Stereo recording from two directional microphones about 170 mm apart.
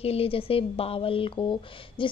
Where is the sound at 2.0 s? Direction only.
30° left (ahead or behind).